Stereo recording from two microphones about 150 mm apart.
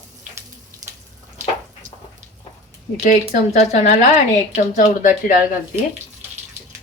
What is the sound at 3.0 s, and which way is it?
A woman's voice, 60° left (ahead or behind).